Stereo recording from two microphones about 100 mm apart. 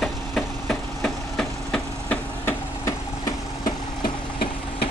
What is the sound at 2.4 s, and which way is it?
Hammer, 35° left (ahead or behind).